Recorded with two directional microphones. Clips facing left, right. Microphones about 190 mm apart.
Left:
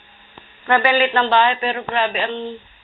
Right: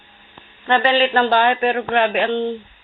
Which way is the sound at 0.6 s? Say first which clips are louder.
Even; 25° right (ahead or behind).